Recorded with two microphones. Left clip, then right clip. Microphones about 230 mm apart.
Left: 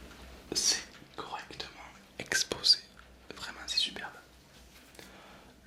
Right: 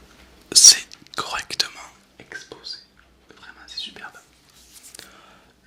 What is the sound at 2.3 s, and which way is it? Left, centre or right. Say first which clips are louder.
Whispering: left 8 dB; left.